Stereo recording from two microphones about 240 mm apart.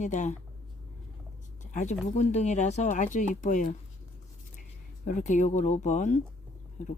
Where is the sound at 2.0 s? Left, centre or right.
Left.